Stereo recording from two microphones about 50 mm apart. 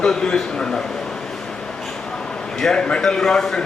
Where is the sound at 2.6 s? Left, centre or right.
Centre.